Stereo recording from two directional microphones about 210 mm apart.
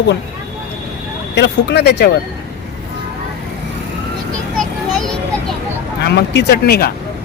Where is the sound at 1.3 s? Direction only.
55° left (ahead or behind).